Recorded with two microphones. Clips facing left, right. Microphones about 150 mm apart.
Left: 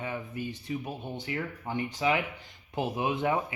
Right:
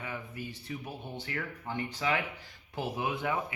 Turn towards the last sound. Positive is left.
turn(degrees=20)  # may be behind; listen again after turning